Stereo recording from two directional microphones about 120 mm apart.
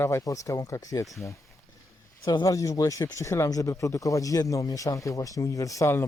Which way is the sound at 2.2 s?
35° left (ahead or behind).